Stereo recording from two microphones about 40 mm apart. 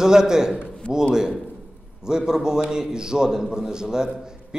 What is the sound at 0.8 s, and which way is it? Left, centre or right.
Speech, left.